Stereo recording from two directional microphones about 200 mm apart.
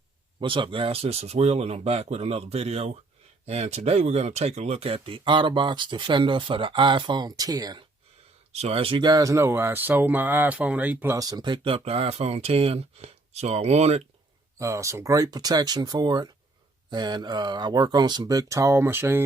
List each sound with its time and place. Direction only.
0.3 s speech: 25° right (ahead or behind)
8.5 s speech: 30° right (ahead or behind)
14.6 s speech: 15° right (ahead or behind)